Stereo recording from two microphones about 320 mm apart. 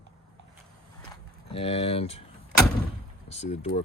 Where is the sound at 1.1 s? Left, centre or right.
Centre.